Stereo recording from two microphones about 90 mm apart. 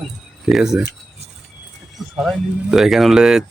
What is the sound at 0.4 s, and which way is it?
Speech, 5° right (ahead or behind).